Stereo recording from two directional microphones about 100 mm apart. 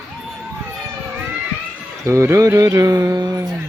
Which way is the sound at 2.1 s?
30° right (ahead or behind).